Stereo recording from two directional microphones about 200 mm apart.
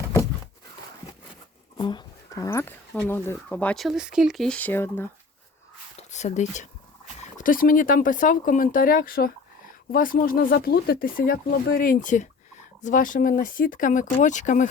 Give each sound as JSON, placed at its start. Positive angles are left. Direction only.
{"t": 1.8, "sound": "speech", "side_deg": 20}
{"t": 6.0, "sound": "speech", "side_deg": 35}